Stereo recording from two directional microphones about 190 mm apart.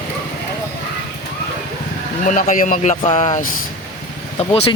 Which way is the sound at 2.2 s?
45° left (ahead or behind).